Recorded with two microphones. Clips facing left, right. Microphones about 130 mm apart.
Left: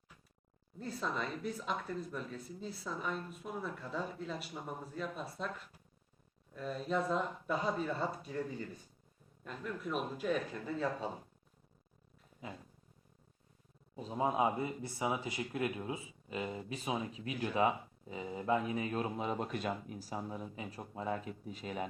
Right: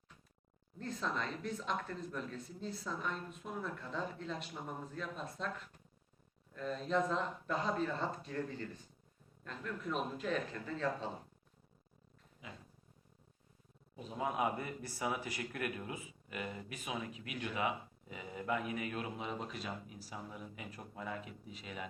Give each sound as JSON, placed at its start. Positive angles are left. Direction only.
{"t": 0.8, "sound": "speech", "side_deg": 10}
{"t": 13.9, "sound": "speech", "side_deg": 30}